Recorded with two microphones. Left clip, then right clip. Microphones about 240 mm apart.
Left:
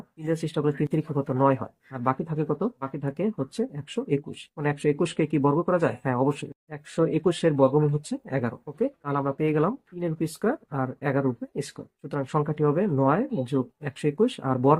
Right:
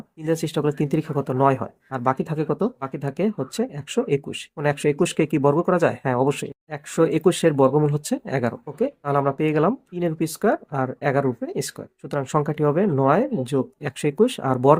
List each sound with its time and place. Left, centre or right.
0.3 s speech: right